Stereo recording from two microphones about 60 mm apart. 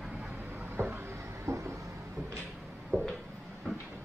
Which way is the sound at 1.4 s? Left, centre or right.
Right.